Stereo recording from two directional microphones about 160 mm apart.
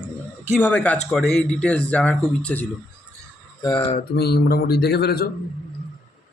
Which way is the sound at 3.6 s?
25° left (ahead or behind).